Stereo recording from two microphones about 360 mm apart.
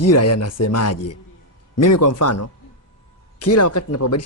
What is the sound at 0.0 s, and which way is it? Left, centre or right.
Speech, left.